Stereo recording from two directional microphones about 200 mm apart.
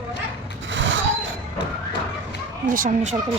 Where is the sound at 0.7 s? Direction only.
70° right (ahead or behind).